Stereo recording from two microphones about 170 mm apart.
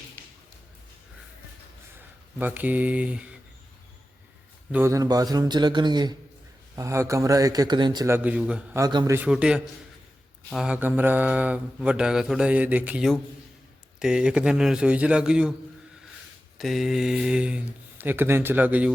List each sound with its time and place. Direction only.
0.2 s a sound: 10° left (ahead or behind)
2.4 s mantra: 10° right (ahead or behind)
4.7 s a man's voice: 15° right (ahead or behind)
6.7 s mantra: 15° right (ahead or behind)
8.8 s a man's voice: 25° right (ahead or behind)
9.1 s a man's voice: 5° right (ahead or behind)
10.5 s mantra: 5° right (ahead or behind)
14.0 s a man's voice: 5° right (ahead or behind)
16.6 s mantra: centre (ahead or behind)